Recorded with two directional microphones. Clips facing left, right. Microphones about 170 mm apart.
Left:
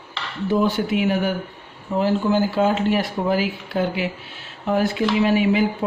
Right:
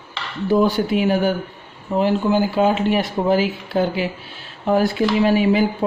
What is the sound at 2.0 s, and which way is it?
Speech, 15° right (ahead or behind).